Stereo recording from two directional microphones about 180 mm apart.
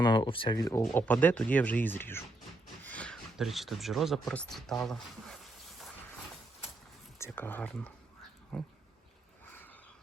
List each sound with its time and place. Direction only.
0.0 s speech: 25° left (ahead or behind)
0.8 s speech: 5° left (ahead or behind)
7.3 s speech: 10° left (ahead or behind)
8.5 s dog: 5° left (ahead or behind)